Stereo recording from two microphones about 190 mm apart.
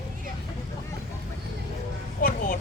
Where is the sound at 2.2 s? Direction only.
45° left (ahead or behind).